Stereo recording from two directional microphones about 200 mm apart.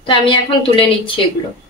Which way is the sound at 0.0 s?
25° left (ahead or behind).